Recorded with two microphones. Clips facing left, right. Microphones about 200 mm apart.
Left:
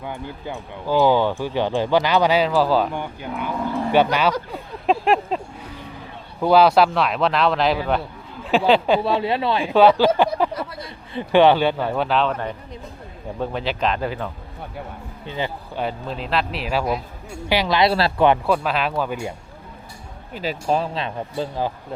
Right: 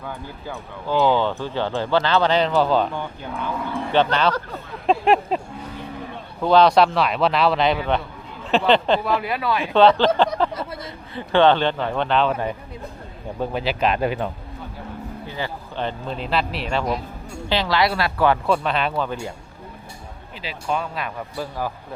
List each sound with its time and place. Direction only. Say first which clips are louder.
0.0 s speech: left 2 dB; 15° left (ahead or behind)
3.9 s a sound: left 1 dB; 10° left (ahead or behind)
5.0 s a man's voice: right 3 dB; centre (ahead or behind)
6.4 s a man's voice: even; 5° left (ahead or behind)
9.0 s speech: left 2 dB; 30° left (ahead or behind)
9.7 s speech: left 1 dB; 5° left (ahead or behind)
10.5 s speech: even; 25° right (ahead or behind)
11.1 s speech: left 2 dB; 15° left (ahead or behind)
12.3 s speech: right 2 dB; 10° right (ahead or behind)
15.3 s a man's voice: left 5 dB; 20° left (ahead or behind)
15.8 s a man's voice: left 1 dB; 5° left (ahead or behind)
17.5 s speech: left 2 dB; 15° left (ahead or behind)
18.4 s a man's voice: even; 5° left (ahead or behind)
20.3 s speech: left 4 dB; 45° left (ahead or behind); by 21.7 s 20° left (ahead or behind)